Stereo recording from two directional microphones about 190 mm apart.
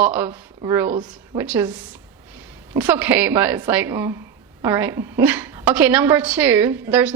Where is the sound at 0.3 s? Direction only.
25° right (ahead or behind).